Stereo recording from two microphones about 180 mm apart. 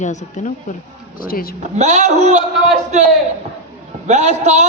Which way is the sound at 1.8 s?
40° right (ahead or behind).